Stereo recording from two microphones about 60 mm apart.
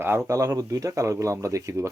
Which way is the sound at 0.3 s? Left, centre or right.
Right.